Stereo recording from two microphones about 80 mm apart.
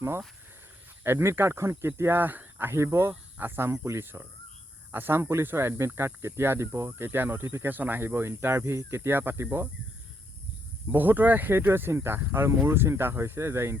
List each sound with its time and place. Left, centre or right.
1.0 s speech: right
10.9 s speech: right